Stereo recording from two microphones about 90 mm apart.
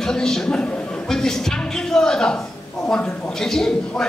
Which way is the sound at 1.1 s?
5° left (ahead or behind).